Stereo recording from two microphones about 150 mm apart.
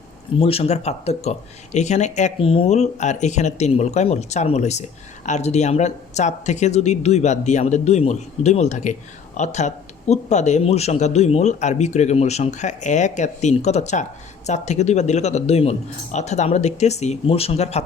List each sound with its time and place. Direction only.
0.3 s speech: 40° left (ahead or behind)